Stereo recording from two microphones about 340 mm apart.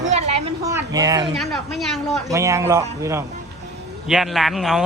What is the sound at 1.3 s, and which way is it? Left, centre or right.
A man's voice, centre.